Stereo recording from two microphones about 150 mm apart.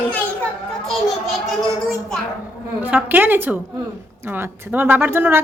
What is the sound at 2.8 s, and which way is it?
A woman's voice, 10° right (ahead or behind).